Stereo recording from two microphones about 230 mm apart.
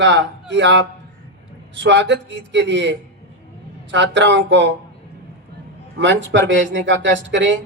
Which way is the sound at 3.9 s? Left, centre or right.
Right.